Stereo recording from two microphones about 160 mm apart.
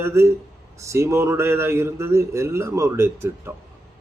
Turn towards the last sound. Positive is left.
turn(degrees=-15)  # may be behind; listen again after turning